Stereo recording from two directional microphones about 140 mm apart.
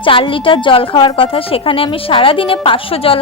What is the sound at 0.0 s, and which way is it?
A woman's voice, 40° left (ahead or behind).